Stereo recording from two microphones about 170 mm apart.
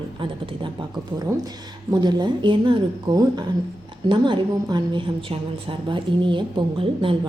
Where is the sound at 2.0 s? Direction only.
25° right (ahead or behind).